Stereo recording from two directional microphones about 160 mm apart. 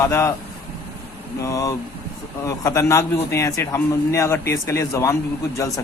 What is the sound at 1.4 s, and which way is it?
A man's voice, 20° left (ahead or behind).